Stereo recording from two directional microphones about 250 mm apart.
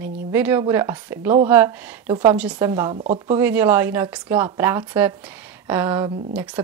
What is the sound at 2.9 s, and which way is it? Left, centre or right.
Speech, right.